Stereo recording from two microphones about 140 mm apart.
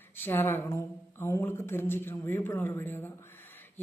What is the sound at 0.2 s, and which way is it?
A woman's voice, 15° left (ahead or behind).